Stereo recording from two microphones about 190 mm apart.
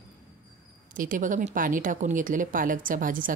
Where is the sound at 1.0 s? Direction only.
45° right (ahead or behind).